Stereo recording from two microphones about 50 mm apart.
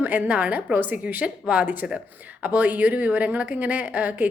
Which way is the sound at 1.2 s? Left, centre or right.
Right.